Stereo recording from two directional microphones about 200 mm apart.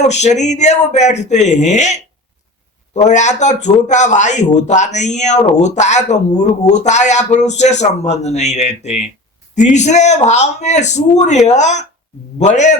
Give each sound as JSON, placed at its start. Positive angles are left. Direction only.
{"t": 0.0, "sound": "speech", "side_deg": 35}